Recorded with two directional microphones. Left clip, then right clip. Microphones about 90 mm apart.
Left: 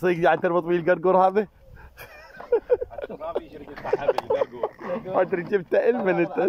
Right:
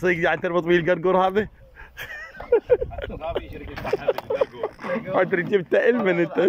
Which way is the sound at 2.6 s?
10° right (ahead or behind).